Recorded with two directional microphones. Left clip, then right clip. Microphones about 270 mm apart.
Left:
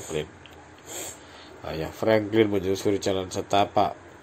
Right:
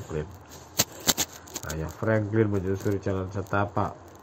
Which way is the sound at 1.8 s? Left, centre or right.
Left.